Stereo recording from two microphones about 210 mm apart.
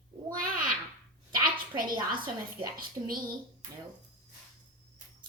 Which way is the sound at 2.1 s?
25° right (ahead or behind).